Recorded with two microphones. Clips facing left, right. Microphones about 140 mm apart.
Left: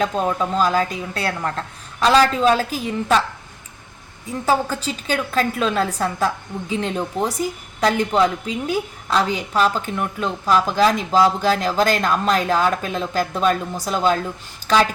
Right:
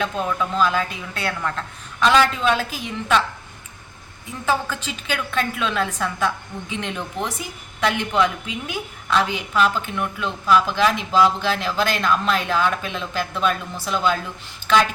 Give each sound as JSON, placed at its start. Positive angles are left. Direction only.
{"t": 0.0, "sound": "a woman's voice", "side_deg": 35}
{"t": 4.3, "sound": "a woman's voice", "side_deg": 40}